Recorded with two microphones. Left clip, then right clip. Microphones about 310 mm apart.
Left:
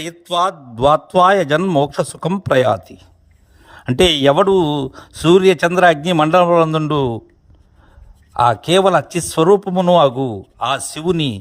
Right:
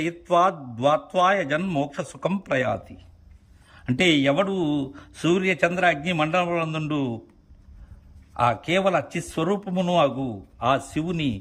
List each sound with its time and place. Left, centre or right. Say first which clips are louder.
0.3 s speech: left 4 dB; centre
8.4 s speech: left 9 dB; centre